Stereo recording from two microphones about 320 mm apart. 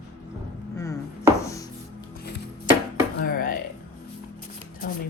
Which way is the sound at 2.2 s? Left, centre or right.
Left.